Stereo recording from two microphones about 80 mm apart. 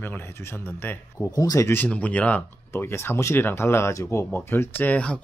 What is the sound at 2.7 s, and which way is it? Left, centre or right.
Speech, left.